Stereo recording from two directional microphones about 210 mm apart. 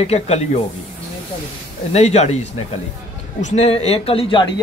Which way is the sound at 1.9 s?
30° left (ahead or behind).